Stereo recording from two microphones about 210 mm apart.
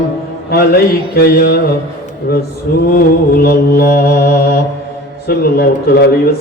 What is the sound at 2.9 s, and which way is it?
Mantra, 45° left (ahead or behind).